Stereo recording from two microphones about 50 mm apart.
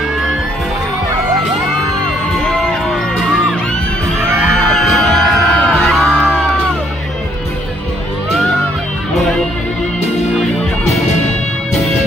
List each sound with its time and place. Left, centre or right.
4.5 s music: centre
4.7 s music: centre
8.3 s music: centre
10.3 s music: centre